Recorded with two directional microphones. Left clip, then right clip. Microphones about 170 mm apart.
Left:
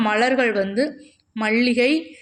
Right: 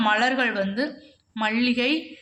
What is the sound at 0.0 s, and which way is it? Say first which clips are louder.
A woman's voice: left 3 dB; 25° left (ahead or behind).